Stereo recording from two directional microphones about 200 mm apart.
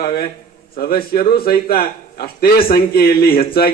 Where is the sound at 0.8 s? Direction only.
50° left (ahead or behind).